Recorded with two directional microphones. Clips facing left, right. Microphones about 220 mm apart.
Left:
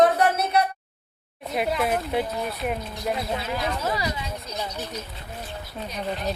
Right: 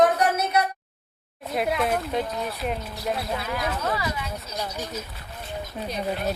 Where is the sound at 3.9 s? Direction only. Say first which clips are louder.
Even; 20° left (ahead or behind).